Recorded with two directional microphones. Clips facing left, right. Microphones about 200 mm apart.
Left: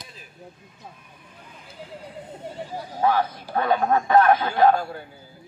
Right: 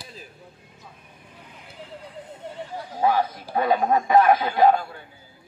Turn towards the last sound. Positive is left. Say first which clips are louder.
# even
turn(degrees=-10)  # may be behind; listen again after turning